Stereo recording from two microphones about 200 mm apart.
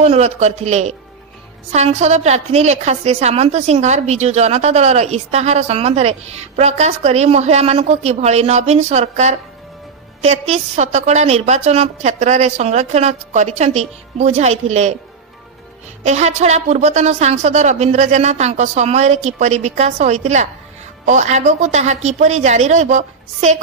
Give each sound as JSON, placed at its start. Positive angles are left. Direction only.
{"t": 0.0, "sound": "a woman's voice", "side_deg": -35}
{"t": 16.0, "sound": "a woman's voice", "side_deg": -35}